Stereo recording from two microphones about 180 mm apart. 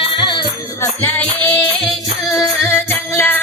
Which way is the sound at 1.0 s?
10° left (ahead or behind).